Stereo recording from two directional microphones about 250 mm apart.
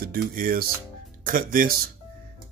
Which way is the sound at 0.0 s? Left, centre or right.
Right.